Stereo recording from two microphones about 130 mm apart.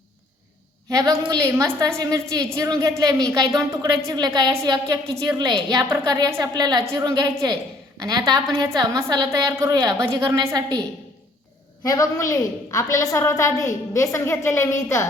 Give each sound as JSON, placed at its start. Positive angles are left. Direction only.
{"t": 0.9, "sound": "a woman's voice", "side_deg": -30}
{"t": 11.8, "sound": "a woman's voice", "side_deg": 30}